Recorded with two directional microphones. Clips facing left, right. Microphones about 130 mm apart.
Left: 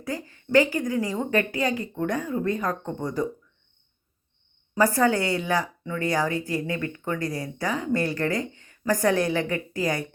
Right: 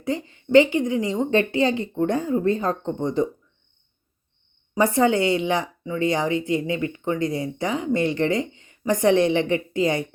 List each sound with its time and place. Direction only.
0.0 s speech: 25° right (ahead or behind)
4.7 s speech: 20° right (ahead or behind)